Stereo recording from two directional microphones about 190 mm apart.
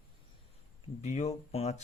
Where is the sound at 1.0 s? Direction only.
35° left (ahead or behind).